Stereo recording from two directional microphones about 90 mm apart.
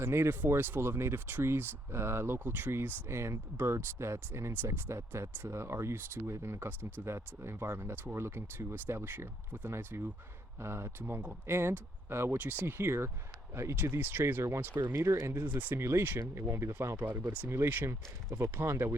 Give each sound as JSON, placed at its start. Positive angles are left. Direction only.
{"t": 0.0, "sound": "speech", "side_deg": -30}
{"t": 11.0, "sound": "speech", "side_deg": -20}